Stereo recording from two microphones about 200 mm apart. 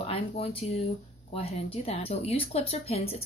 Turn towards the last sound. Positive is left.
turn(degrees=30)  # may be behind; listen again after turning